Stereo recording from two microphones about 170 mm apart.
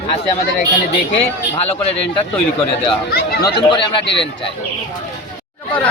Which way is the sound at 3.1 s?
70° left (ahead or behind).